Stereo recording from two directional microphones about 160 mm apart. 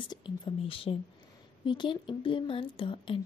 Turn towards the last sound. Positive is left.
turn(degrees=30)  # may be behind; listen again after turning